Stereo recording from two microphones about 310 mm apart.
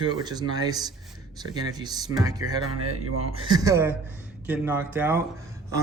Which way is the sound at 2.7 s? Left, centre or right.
Right.